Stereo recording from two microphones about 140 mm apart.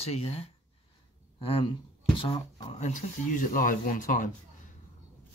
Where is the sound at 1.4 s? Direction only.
40° left (ahead or behind).